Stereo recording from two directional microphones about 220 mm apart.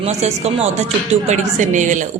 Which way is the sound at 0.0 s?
30° right (ahead or behind).